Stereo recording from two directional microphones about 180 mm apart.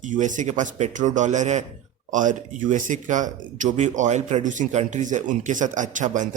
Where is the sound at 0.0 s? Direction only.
45° right (ahead or behind).